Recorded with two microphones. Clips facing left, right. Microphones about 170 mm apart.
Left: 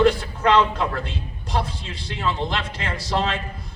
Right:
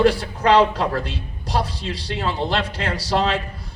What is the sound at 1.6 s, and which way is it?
Speech, 75° right (ahead or behind).